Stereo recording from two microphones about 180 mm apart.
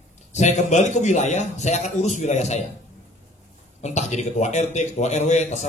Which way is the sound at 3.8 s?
40° left (ahead or behind).